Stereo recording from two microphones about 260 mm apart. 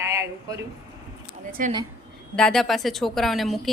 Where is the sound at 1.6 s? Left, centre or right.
Right.